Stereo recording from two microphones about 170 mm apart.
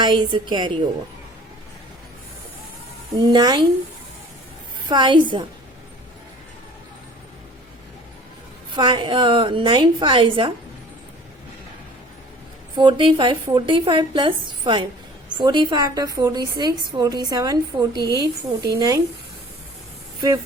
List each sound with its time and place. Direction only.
0.0 s a woman's voice: 25° right (ahead or behind)
3.2 s a woman's voice: 25° right (ahead or behind)
4.9 s a woman's voice: 25° right (ahead or behind)
8.7 s a woman's voice: 25° right (ahead or behind)
12.7 s a woman's voice: 25° right (ahead or behind)